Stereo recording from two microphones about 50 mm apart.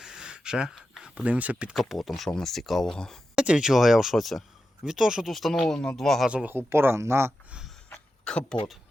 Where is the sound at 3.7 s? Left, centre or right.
Centre.